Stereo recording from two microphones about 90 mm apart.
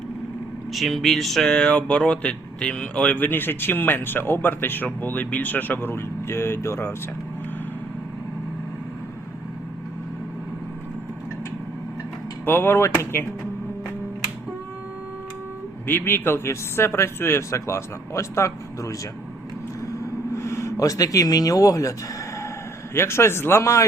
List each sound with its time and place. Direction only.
0.7 s speech: centre (ahead or behind); by 6.9 s 30° left (ahead or behind)
12.5 s speech: 25° left (ahead or behind)
15.9 s speech: 25° left (ahead or behind)
19.8 s a sound: 35° left (ahead or behind)
23.0 s speech: 30° left (ahead or behind)